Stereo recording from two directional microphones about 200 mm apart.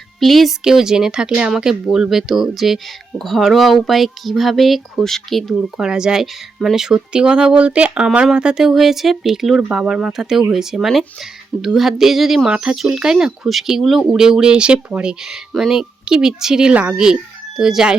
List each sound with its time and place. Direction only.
0.2 s speech: centre (ahead or behind)